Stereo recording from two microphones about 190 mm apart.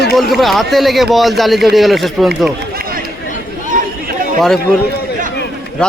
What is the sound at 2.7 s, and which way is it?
Chatter, 50° right (ahead or behind).